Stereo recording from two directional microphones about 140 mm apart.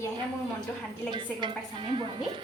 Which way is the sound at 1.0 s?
35° right (ahead or behind).